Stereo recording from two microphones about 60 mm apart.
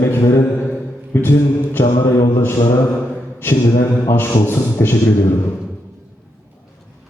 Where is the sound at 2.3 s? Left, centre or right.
Left.